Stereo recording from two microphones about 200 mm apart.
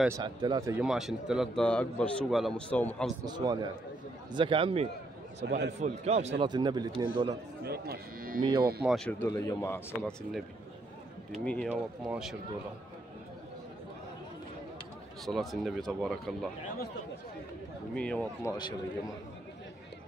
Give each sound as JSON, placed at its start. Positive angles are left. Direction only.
{"t": 0.1, "sound": "speech", "side_deg": -20}
{"t": 0.8, "sound": "a man's voice", "side_deg": 0}
{"t": 3.3, "sound": "speech", "side_deg": -20}
{"t": 5.4, "sound": "speech", "side_deg": -55}
{"t": 5.8, "sound": "a man's voice", "side_deg": -35}
{"t": 6.5, "sound": "speech", "side_deg": -20}
{"t": 7.6, "sound": "speech", "side_deg": -50}
{"t": 8.4, "sound": "speech", "side_deg": -20}
{"t": 8.8, "sound": "a man's voice", "side_deg": 0}
{"t": 9.3, "sound": "a man's voice", "side_deg": 15}
{"t": 11.4, "sound": "a man's voice", "side_deg": 5}
{"t": 15.2, "sound": "a man's voice", "side_deg": 0}
{"t": 17.9, "sound": "a man's voice", "side_deg": 5}
{"t": 18.5, "sound": "a man's voice", "side_deg": 20}